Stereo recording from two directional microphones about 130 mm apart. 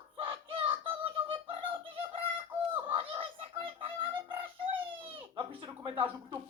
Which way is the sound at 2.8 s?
45° right (ahead or behind).